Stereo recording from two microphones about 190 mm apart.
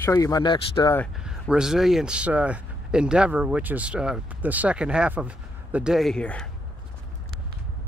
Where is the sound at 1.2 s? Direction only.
5° right (ahead or behind).